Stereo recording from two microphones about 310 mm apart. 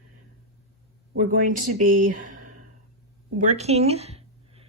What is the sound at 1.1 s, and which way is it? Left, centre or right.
Speech, right.